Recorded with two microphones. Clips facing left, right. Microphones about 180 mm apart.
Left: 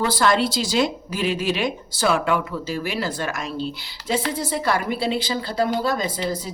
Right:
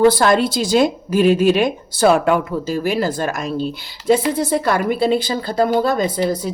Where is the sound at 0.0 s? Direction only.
50° right (ahead or behind).